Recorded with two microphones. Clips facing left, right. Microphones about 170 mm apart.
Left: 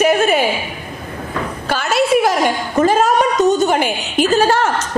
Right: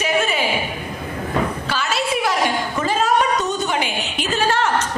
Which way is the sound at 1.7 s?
50° left (ahead or behind).